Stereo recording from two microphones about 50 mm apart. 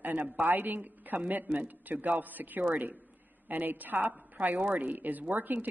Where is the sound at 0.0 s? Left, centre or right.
Right.